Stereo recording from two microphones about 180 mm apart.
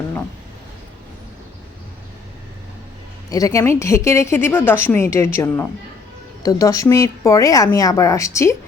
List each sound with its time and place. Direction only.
3.2 s a woman's voice: 20° left (ahead or behind)